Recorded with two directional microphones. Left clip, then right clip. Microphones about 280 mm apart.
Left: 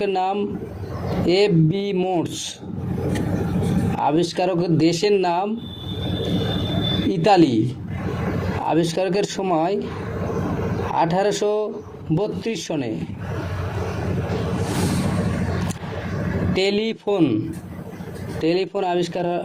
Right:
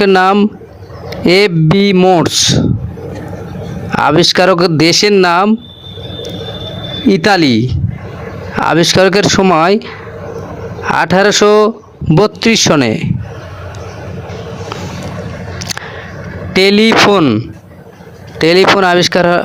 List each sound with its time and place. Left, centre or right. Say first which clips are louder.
0.0 s speech: right 13 dB; right
4.0 s speech: right 12 dB; right
7.1 s speech: right 7 dB; right
8.6 s speech: right 13 dB; right
10.9 s speech: right 11 dB; right
16.6 s speech: right 16 dB; right